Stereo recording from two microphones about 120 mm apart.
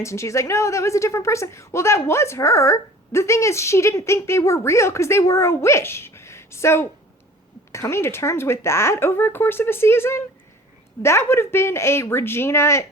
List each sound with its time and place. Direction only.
0.0 s a woman's voice: 25° left (ahead or behind)